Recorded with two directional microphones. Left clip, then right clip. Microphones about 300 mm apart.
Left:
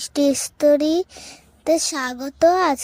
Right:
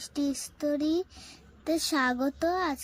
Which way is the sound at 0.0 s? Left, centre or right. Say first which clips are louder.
Left 13 dB; left.